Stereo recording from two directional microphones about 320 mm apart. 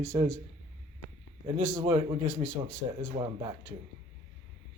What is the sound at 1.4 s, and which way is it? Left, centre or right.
Speech, right.